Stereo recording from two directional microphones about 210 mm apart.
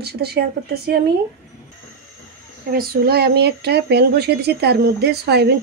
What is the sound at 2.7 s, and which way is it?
Speech, 45° right (ahead or behind).